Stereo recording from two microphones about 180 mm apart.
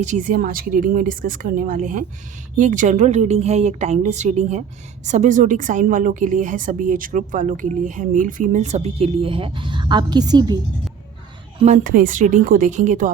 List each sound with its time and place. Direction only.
0.0 s a woman's voice: 45° right (ahead or behind); by 10.6 s 20° right (ahead or behind)
11.6 s a woman's voice: 45° right (ahead or behind)